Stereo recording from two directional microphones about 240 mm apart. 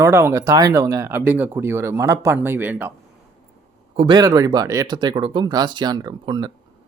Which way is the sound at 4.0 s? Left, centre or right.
Centre.